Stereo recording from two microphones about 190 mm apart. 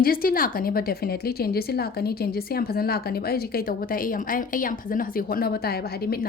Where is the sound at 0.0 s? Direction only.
50° left (ahead or behind).